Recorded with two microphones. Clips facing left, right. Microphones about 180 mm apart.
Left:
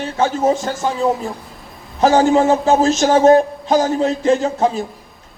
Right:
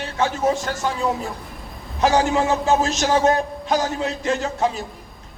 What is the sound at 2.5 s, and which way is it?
Speech, 30° left (ahead or behind).